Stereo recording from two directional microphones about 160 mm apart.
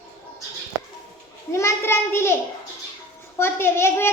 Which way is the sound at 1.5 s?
15° left (ahead or behind).